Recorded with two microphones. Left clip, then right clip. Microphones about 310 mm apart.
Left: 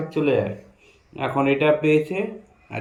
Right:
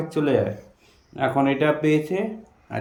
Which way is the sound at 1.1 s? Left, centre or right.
Centre.